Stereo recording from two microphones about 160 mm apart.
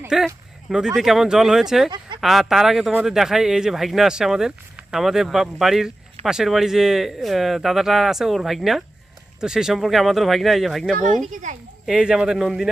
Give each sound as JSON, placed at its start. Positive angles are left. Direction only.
{"t": 0.1, "sound": "speech", "side_deg": -5}
{"t": 10.9, "sound": "speech", "side_deg": -55}
{"t": 11.9, "sound": "speech", "side_deg": -5}